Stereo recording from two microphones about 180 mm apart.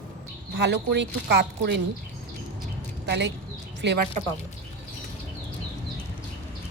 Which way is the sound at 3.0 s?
70° right (ahead or behind).